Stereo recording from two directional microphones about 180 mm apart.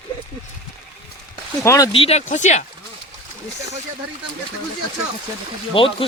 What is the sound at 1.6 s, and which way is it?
Speech, 15° left (ahead or behind).